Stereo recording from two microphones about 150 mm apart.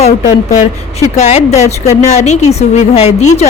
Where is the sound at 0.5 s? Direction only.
50° left (ahead or behind).